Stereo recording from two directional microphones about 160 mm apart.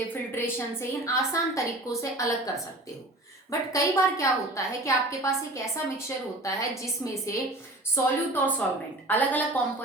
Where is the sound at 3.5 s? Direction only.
20° left (ahead or behind).